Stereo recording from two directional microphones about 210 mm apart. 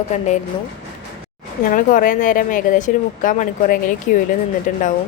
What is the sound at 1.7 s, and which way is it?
Speech, 40° left (ahead or behind).